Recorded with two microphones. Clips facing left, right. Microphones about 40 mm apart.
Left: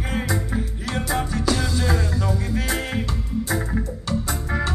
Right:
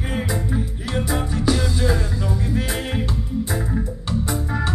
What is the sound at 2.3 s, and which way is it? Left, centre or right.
Music, right.